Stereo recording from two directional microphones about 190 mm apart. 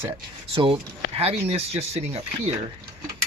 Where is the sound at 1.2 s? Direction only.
30° right (ahead or behind).